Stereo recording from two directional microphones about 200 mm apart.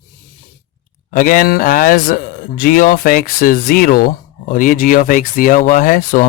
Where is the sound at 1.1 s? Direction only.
40° left (ahead or behind).